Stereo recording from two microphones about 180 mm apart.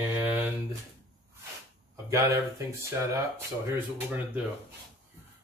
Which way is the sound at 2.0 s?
15° right (ahead or behind).